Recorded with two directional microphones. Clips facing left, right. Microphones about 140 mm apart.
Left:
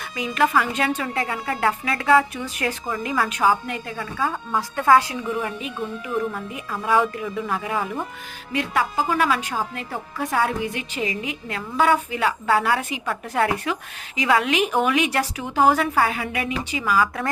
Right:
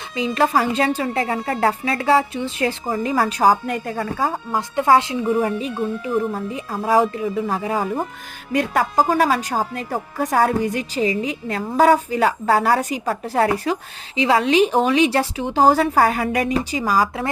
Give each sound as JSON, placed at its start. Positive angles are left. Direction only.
{"t": 0.2, "sound": "a woman's voice", "side_deg": -35}
{"t": 4.5, "sound": "speech", "side_deg": -20}
{"t": 5.3, "sound": "a woman's voice", "side_deg": -35}